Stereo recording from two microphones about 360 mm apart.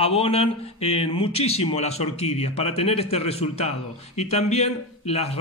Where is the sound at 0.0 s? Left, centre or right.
Centre.